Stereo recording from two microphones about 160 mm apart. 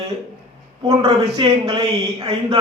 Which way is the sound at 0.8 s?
30° right (ahead or behind).